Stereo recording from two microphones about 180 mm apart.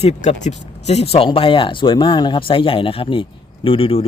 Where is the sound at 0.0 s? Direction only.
40° left (ahead or behind).